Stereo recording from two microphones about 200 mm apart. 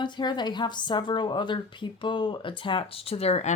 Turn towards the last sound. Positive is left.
turn(degrees=30)  # may be behind; listen again after turning